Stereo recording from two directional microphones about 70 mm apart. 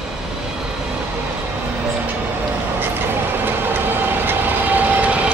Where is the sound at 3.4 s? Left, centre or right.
Right.